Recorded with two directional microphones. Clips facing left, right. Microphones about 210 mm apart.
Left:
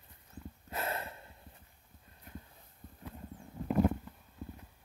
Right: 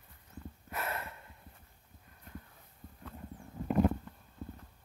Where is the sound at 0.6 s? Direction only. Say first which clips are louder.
Left 2 dB; 25° left (ahead or behind).